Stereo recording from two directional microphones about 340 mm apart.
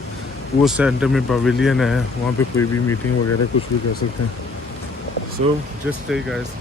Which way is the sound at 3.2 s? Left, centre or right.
Left.